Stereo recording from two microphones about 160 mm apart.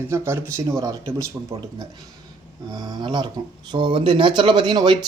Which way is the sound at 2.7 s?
25° right (ahead or behind).